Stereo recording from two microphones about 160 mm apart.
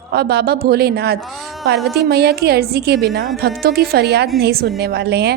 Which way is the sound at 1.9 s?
90° right.